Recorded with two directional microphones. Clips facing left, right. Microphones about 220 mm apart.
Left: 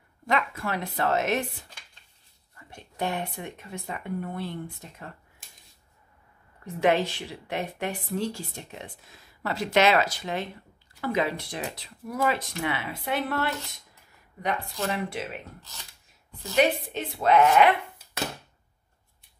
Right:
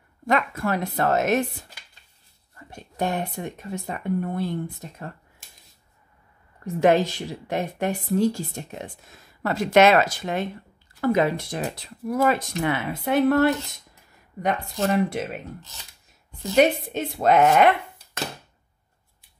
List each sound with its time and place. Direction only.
0.3 s speech: 45° right (ahead or behind)
6.6 s speech: 45° right (ahead or behind)
16.5 s speech: 45° right (ahead or behind)